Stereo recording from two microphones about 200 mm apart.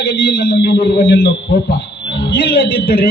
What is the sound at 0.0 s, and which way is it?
A man's voice, 55° left (ahead or behind).